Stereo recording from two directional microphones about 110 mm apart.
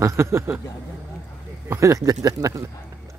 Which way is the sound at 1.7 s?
25° right (ahead or behind).